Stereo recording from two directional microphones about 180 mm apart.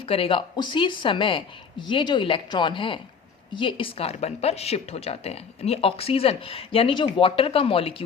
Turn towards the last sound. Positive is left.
turn(degrees=30)  # may be behind; listen again after turning